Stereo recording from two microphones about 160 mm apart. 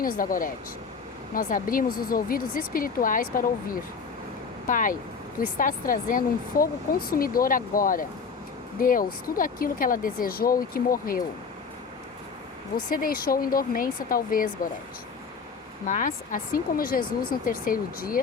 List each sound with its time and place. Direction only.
0.0 s speech: 60° left (ahead or behind)
12.9 s speech: 65° left (ahead or behind)
15.9 s speech: 55° left (ahead or behind)